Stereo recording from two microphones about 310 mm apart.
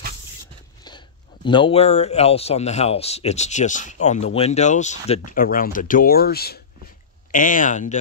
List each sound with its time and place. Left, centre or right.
0.8 s speech: centre